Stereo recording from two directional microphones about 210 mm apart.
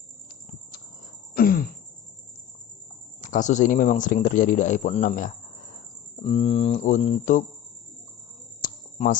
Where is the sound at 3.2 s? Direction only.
35° left (ahead or behind).